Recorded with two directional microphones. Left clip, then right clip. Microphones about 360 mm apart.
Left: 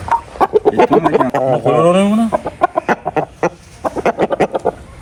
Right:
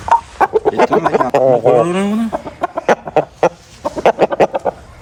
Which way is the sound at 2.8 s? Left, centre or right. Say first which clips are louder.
Right 3 dB; right.